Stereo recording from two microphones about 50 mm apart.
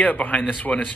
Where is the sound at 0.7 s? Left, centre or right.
Centre.